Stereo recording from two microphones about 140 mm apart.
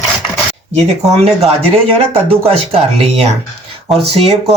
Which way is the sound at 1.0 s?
50° right (ahead or behind).